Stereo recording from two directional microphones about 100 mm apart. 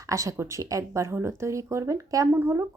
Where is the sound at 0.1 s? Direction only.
30° right (ahead or behind).